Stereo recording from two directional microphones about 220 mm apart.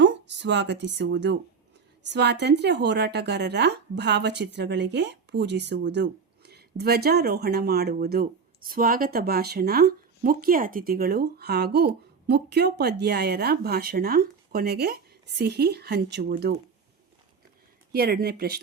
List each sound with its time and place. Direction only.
0.0 s a woman's voice: 50° right (ahead or behind)
17.9 s a woman's voice: 45° right (ahead or behind)